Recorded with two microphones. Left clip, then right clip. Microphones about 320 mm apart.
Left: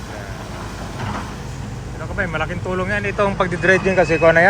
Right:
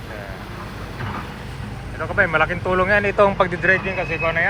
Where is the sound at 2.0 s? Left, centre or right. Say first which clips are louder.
Right 5 dB; centre.